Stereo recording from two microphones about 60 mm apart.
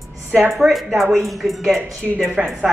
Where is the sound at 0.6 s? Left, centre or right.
Centre.